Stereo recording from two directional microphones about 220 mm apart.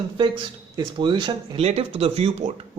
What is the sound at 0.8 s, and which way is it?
A man's voice, 20° right (ahead or behind).